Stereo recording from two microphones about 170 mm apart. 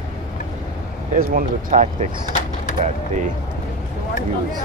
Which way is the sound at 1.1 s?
55° right (ahead or behind).